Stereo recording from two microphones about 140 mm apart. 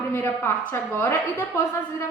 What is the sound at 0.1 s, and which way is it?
A woman's voice, 20° left (ahead or behind).